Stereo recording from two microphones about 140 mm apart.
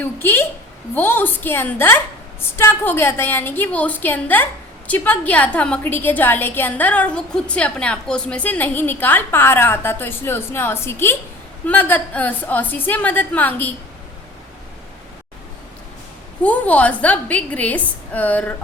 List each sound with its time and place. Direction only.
0.0 s a woman's voice: 15° left (ahead or behind)
16.4 s a woman's voice: 10° left (ahead or behind)